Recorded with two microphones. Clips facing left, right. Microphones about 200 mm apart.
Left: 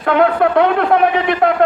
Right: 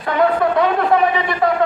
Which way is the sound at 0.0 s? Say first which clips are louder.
Left 3 dB; 65° left (ahead or behind).